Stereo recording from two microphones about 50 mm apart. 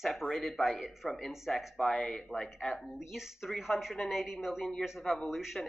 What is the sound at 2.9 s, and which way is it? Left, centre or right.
Speech, centre.